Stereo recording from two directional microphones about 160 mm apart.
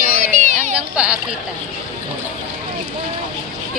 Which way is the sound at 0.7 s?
5° right (ahead or behind).